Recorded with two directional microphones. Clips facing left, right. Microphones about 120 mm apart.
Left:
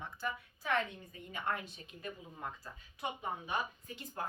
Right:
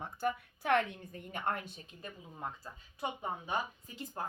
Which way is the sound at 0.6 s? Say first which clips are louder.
Right 4 dB; 60° right (ahead or behind).